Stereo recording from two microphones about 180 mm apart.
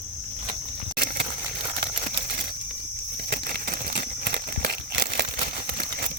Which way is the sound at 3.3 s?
60° right (ahead or behind).